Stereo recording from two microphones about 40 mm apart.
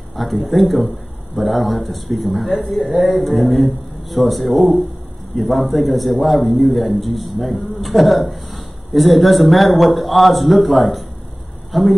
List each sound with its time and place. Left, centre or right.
0.1 s a man's voice: centre